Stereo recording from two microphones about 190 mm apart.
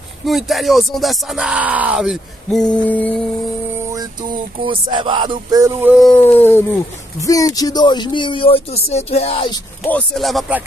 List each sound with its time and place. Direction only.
0.2 s speech: centre (ahead or behind)
3.9 s music: 20° right (ahead or behind)
6.0 s speech: 10° left (ahead or behind); by 9.5 s 30° left (ahead or behind)
9.8 s speech: 5° left (ahead or behind)